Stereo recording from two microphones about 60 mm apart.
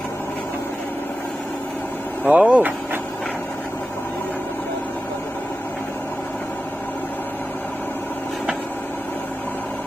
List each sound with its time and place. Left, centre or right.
2.2 s speech: right